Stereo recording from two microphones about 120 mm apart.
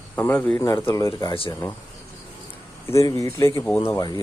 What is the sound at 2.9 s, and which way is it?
Speech, 25° left (ahead or behind).